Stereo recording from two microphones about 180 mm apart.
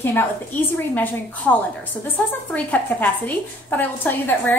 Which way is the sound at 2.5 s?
10° left (ahead or behind).